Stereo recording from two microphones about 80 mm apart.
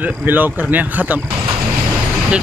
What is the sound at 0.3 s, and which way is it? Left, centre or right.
Speech, right.